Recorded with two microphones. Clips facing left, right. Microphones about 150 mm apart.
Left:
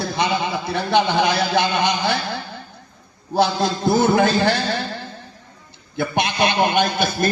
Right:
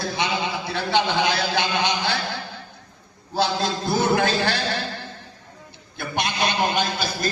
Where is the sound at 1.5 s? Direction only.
55° left (ahead or behind).